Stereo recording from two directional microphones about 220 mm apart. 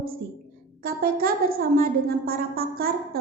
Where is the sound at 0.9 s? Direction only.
40° right (ahead or behind).